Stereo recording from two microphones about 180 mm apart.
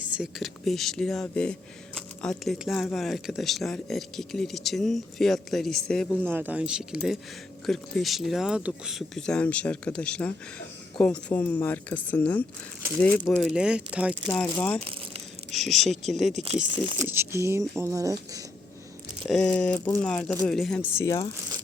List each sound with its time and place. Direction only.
0.2 s speech: centre (ahead or behind)
6.2 s speech: 10° right (ahead or behind); by 13.2 s 10° left (ahead or behind)
13.2 s speech: centre (ahead or behind)
14.3 s speech: 5° left (ahead or behind)
16.3 s speech: 35° right (ahead or behind)
17.0 s speech: 15° right (ahead or behind)
19.3 s speech: 5° left (ahead or behind)